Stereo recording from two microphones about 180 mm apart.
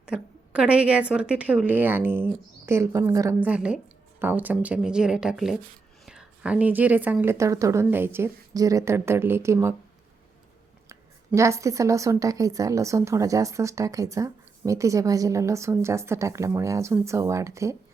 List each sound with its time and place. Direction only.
0.1 s a woman's voice: 5° right (ahead or behind)
10.8 s a woman's voice: 15° right (ahead or behind)